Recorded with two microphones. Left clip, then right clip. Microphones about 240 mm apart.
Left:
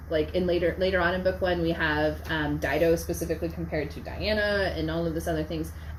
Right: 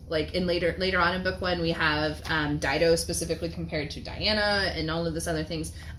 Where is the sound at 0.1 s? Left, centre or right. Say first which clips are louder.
Left 2 dB; right.